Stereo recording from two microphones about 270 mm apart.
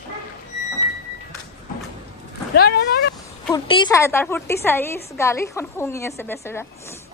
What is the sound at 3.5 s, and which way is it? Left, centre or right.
A woman's voice, centre.